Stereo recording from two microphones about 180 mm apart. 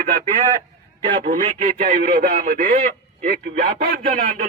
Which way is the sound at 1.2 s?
40° right (ahead or behind).